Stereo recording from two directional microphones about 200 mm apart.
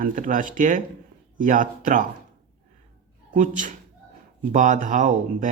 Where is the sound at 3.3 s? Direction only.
40° right (ahead or behind).